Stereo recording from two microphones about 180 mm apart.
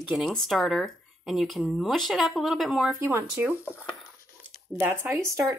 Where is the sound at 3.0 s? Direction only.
15° right (ahead or behind).